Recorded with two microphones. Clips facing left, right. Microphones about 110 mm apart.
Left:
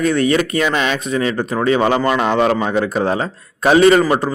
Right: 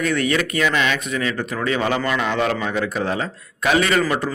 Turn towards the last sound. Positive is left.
turn(degrees=30)  # may be behind; listen again after turning